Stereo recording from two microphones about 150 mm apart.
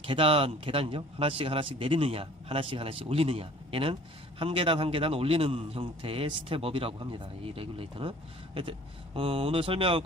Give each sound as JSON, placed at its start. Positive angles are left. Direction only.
{"t": 0.0, "sound": "a man's voice", "side_deg": -35}
{"t": 9.1, "sound": "a man's voice", "side_deg": -40}